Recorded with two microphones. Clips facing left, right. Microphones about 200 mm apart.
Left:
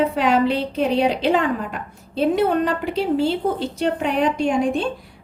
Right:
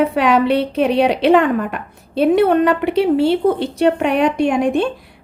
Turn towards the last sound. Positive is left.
turn(degrees=-65)  # may be behind; listen again after turning